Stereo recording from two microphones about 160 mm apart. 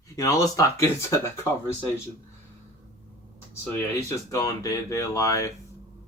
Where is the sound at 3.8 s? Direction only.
15° left (ahead or behind).